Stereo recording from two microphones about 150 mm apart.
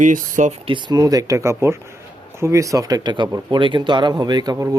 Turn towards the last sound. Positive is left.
turn(degrees=-25)  # may be behind; listen again after turning